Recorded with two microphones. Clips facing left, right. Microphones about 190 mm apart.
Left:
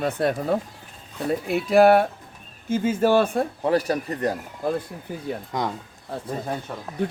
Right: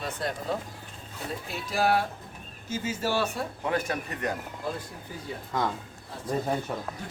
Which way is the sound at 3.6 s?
35° left (ahead or behind).